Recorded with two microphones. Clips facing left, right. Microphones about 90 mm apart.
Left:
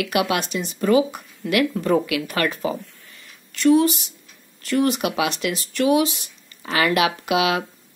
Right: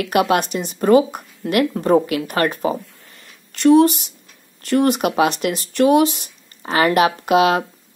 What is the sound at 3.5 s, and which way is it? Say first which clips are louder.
A woman's voice: right 4 dB; 55° right (ahead or behind).